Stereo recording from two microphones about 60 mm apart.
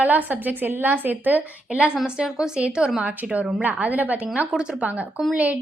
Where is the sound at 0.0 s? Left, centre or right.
Right.